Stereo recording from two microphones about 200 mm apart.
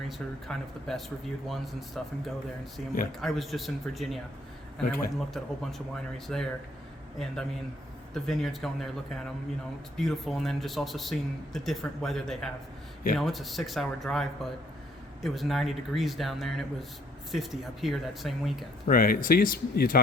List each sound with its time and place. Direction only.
0.1 s speech: centre (ahead or behind)
4.8 s speech: 45° left (ahead or behind)
5.3 s speech: centre (ahead or behind)
18.9 s speech: 45° left (ahead or behind)